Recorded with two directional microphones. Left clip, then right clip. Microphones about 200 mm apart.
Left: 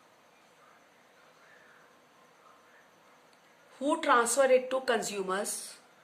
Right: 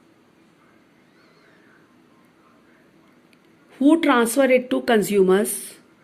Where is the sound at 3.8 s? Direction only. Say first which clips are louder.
Right 9 dB; 30° right (ahead or behind).